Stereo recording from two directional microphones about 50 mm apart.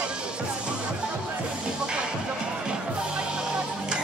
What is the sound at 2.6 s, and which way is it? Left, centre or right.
Music, centre.